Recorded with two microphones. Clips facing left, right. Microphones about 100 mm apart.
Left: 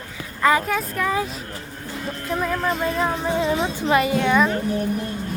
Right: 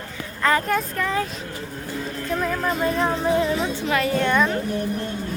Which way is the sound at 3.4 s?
20° left (ahead or behind).